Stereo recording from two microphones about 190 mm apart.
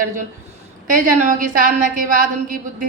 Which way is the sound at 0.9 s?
40° right (ahead or behind).